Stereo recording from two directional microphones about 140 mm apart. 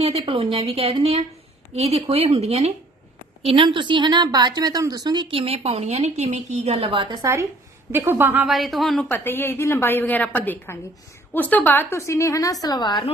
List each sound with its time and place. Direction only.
0.0 s a woman's voice: 45° right (ahead or behind)
7.2 s a woman's voice: 20° right (ahead or behind)
8.5 s speech: centre (ahead or behind)
9.0 s a woman's voice: 15° left (ahead or behind); by 13.1 s 30° left (ahead or behind)